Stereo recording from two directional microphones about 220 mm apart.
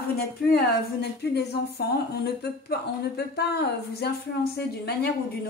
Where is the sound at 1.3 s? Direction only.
50° left (ahead or behind).